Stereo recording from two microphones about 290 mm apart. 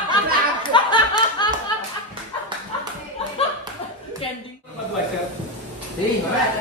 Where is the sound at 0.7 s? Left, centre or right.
Centre.